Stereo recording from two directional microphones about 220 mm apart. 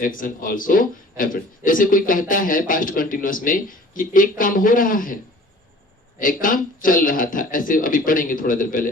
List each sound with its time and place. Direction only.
0.0 s speech: 40° left (ahead or behind)